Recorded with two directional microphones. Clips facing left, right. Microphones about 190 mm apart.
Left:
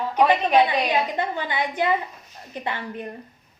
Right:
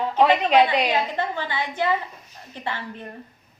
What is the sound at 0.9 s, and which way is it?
A woman's voice, 15° left (ahead or behind).